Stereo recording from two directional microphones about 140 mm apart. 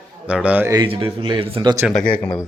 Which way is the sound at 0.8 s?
40° right (ahead or behind).